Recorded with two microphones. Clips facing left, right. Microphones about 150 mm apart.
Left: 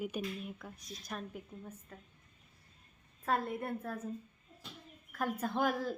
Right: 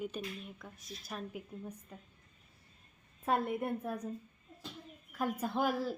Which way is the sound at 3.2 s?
20° right (ahead or behind).